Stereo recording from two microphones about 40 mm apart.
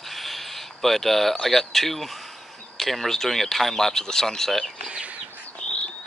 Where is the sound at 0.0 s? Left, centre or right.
Centre.